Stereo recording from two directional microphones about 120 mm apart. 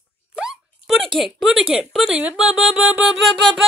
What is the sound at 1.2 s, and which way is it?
Music, 5° right (ahead or behind).